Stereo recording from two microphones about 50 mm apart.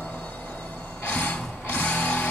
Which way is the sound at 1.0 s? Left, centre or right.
Left.